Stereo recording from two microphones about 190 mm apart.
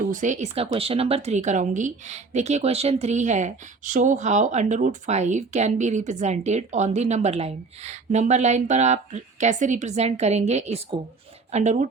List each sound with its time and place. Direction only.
0.1 s speech: 40° right (ahead or behind)